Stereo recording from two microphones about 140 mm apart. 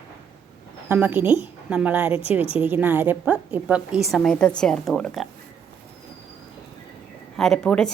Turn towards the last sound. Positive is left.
turn(degrees=5)  # may be behind; listen again after turning